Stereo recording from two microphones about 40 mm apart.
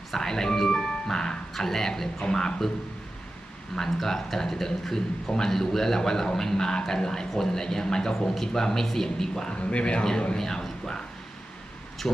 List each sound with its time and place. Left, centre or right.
0.1 s a man's voice: centre
2.2 s a man's voice: left
3.8 s a man's voice: centre
9.5 s speech: left
10.0 s a man's voice: centre
12.0 s a man's voice: centre